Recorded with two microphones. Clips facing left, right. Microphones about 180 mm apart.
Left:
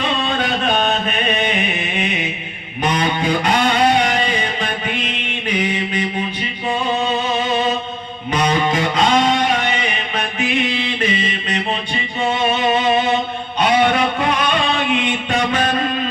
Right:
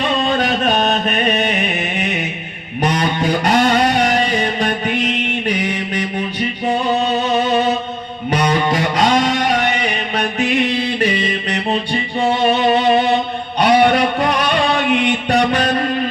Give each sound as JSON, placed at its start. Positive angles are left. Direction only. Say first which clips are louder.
{"t": 0.0, "sound": "music", "louder": "right 3 dB", "side_deg": -40}